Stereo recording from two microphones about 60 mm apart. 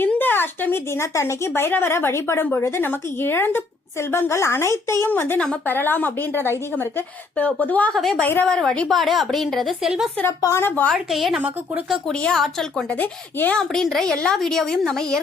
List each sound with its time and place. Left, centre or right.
0.0 s a sound: left
0.9 s speech: left
5.0 s speech: left
7.3 s a woman's voice: left
7.9 s a woman's voice: centre
8.9 s a woman's voice: centre
10.6 s speech: left
10.9 s a woman's voice: centre
12.1 s a woman's voice: centre
12.9 s a woman's voice: left
13.6 s a woman's voice: centre